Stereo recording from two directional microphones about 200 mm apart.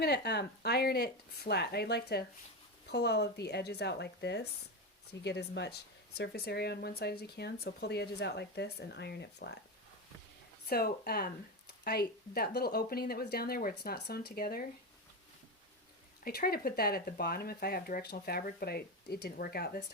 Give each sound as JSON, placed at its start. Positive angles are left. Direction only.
{"t": 0.0, "sound": "speech", "side_deg": 55}
{"t": 10.7, "sound": "speech", "side_deg": 50}
{"t": 16.2, "sound": "speech", "side_deg": 50}